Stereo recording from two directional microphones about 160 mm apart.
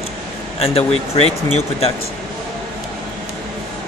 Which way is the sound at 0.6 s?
40° left (ahead or behind).